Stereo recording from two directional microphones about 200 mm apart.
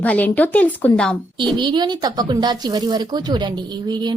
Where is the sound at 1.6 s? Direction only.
20° right (ahead or behind).